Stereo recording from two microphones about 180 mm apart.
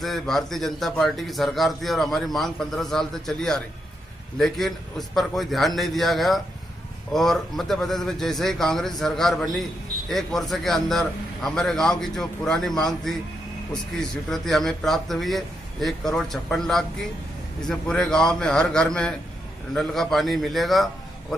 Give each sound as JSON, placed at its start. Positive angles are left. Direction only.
{"t": 0.0, "sound": "a man's voice", "side_deg": 0}